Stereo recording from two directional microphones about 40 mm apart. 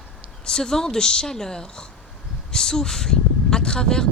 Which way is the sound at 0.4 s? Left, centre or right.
Centre.